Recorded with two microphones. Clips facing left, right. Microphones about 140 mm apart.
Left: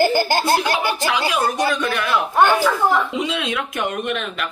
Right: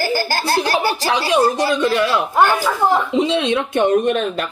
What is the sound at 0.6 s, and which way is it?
Speech, 35° right (ahead or behind).